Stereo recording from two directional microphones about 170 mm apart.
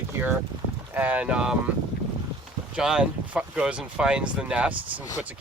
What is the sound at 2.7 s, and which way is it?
Speech, 5° right (ahead or behind).